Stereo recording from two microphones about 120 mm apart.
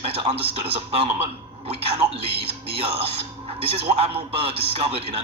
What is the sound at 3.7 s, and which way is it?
Speech, 50° right (ahead or behind).